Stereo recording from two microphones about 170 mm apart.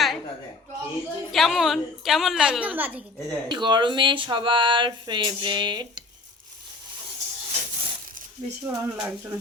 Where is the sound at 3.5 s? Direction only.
25° right (ahead or behind).